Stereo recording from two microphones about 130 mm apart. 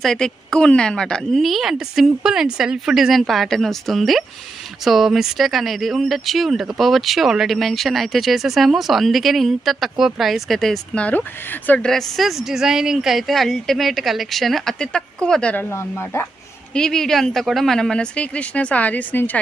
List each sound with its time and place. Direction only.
0.0 s speech: 5° left (ahead or behind)
11.9 s speech: centre (ahead or behind)
15.7 s speech: 20° left (ahead or behind)
16.7 s speech: 5° left (ahead or behind)